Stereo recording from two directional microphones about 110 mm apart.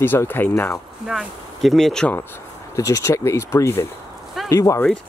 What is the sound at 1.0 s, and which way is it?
Speech, centre (ahead or behind).